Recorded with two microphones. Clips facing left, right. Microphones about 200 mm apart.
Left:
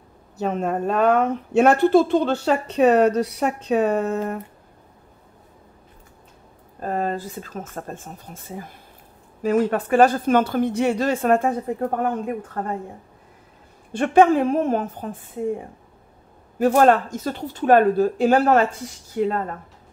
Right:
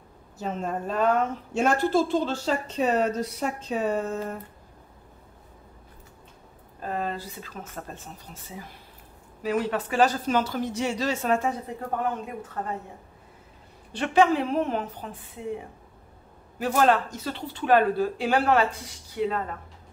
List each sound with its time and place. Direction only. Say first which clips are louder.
0.4 s a woman's voice: left 7 dB; 65° left (ahead or behind)
6.8 s a woman's voice: left 6 dB; 45° left (ahead or behind)
13.9 s speech: left 6 dB; 50° left (ahead or behind)